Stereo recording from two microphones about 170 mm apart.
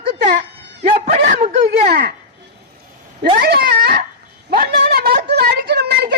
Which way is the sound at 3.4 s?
75° right (ahead or behind).